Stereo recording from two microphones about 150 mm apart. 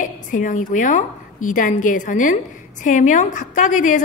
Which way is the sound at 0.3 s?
60° left (ahead or behind).